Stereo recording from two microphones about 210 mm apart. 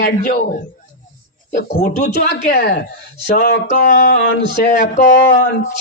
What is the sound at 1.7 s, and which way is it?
Speech, 40° left (ahead or behind).